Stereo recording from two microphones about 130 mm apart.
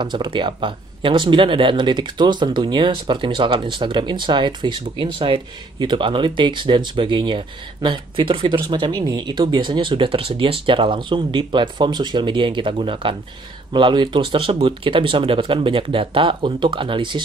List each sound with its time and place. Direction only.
0.0 s speech: 35° right (ahead or behind)